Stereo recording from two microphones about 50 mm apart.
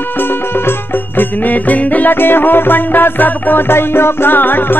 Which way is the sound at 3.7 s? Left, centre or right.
Left.